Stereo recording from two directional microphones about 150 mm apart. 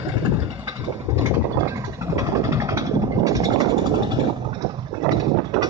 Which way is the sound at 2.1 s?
20° right (ahead or behind).